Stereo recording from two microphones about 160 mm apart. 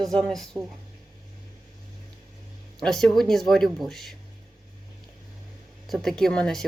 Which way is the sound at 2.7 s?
5° left (ahead or behind).